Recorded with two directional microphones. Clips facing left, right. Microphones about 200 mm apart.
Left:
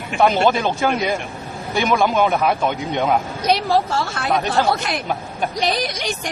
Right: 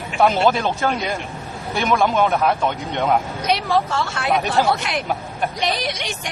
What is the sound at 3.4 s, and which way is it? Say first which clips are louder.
Speech: left 2 dB; 35° left (ahead or behind).